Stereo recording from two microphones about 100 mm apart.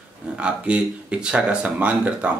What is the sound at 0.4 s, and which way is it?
A man's voice, 10° right (ahead or behind).